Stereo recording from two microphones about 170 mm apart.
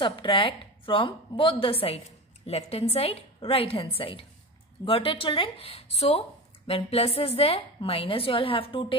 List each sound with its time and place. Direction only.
0.0 s a woman's voice: 30° left (ahead or behind)